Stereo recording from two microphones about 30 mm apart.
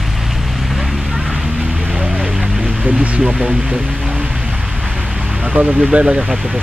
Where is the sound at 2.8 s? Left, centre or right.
Right.